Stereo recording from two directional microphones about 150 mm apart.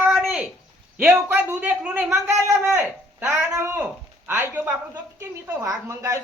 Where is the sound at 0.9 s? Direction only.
10° right (ahead or behind).